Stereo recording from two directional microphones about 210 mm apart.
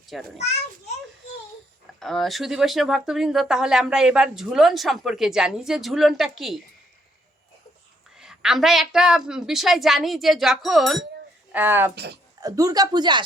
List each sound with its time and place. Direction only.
0.1 s speech: centre (ahead or behind)
2.0 s speech: centre (ahead or behind)
8.1 s speech: centre (ahead or behind); by 13.2 s 20° right (ahead or behind)